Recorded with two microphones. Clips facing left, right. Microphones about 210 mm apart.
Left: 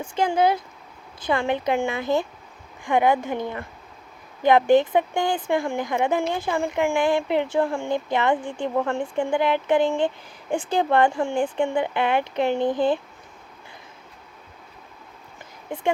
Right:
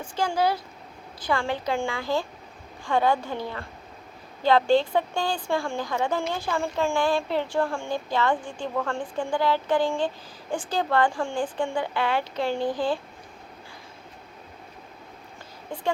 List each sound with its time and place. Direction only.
0.2 s speech: 20° left (ahead or behind)
15.7 s speech: 20° left (ahead or behind)